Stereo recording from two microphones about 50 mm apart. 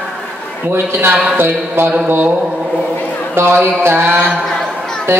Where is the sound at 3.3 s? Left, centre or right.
Right.